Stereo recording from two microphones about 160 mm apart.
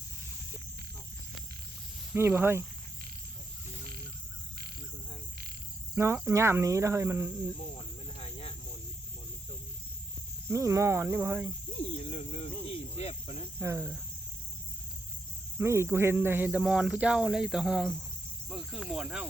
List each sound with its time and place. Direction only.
2.1 s speech: 15° right (ahead or behind)
6.2 s speech: 15° right (ahead or behind)
7.8 s cricket: 35° left (ahead or behind)
10.5 s speech: 20° right (ahead or behind)
11.9 s speech: 40° left (ahead or behind)
12.6 s cricket: 40° left (ahead or behind)
13.6 s speech: 15° right (ahead or behind)
15.5 s speech: 15° right (ahead or behind); by 18.0 s centre (ahead or behind)
18.4 s cricket: centre (ahead or behind)